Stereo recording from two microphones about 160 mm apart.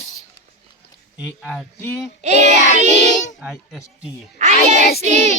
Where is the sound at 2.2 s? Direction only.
45° right (ahead or behind).